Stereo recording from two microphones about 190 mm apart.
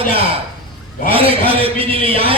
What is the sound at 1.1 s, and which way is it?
Speech, 30° right (ahead or behind).